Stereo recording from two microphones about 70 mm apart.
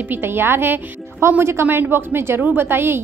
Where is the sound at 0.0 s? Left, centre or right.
Right.